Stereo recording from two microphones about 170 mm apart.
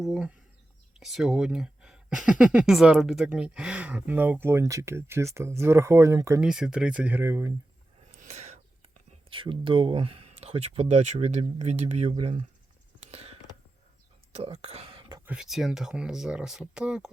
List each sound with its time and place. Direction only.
0.0 s speech: 5° right (ahead or behind)
6.4 s speech: 5° right (ahead or behind)
8.1 s a sound: 40° right (ahead or behind)
9.3 s speech: 30° right (ahead or behind)
13.1 s a sound: 35° right (ahead or behind)
14.3 s speech: 40° right (ahead or behind)
15.3 s speech: 5° right (ahead or behind)